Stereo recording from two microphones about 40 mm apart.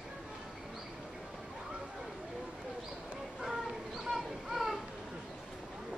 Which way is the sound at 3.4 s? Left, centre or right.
Centre.